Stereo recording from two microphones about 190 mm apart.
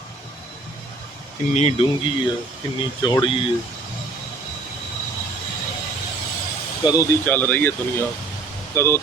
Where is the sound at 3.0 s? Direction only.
25° left (ahead or behind).